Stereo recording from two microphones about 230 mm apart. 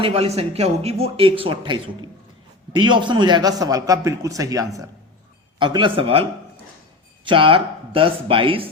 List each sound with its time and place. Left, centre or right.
0.0 s a man's voice: right
7.3 s speech: right